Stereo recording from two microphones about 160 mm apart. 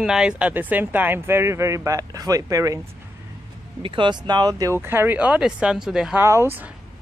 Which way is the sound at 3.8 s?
30° right (ahead or behind).